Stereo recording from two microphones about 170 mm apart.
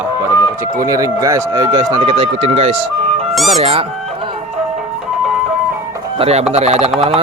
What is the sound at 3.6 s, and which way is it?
Speech, 40° right (ahead or behind).